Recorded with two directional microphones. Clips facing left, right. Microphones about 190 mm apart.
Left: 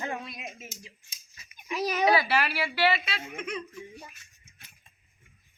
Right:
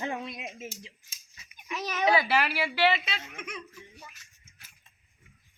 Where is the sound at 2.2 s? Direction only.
15° right (ahead or behind).